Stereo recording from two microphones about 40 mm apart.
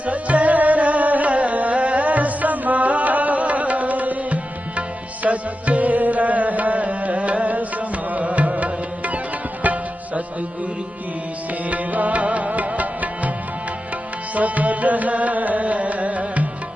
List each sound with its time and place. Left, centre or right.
0.0 s music: right
9.6 s tabla: right
11.7 s music: right
14.3 s music: right